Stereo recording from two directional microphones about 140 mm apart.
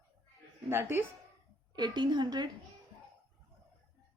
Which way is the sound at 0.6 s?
15° right (ahead or behind).